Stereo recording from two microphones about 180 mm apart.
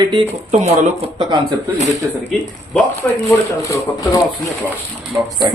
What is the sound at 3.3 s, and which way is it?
Speech, 15° left (ahead or behind).